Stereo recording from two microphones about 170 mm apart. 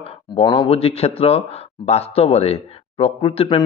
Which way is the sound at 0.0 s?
30° left (ahead or behind).